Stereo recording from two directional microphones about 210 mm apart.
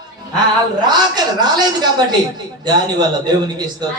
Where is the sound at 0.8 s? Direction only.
20° right (ahead or behind).